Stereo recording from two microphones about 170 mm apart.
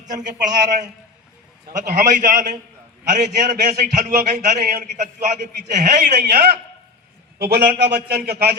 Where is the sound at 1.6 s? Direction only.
55° right (ahead or behind).